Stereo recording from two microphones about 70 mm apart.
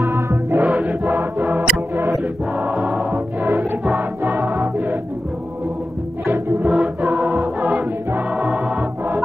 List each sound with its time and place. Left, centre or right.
0.0 s music: right
1.4 s music: right
6.6 s choir: centre